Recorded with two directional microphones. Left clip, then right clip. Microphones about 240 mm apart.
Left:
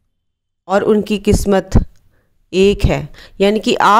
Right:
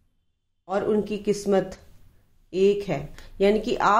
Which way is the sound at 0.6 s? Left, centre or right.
Left.